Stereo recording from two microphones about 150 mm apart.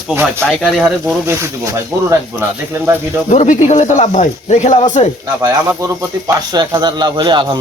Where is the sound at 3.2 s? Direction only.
55° left (ahead or behind).